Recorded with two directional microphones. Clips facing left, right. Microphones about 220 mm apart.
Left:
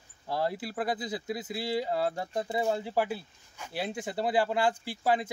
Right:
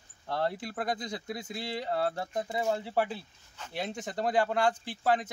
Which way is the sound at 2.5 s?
10° left (ahead or behind).